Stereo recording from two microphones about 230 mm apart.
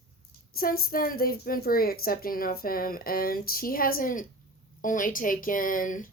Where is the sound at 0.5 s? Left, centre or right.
Left.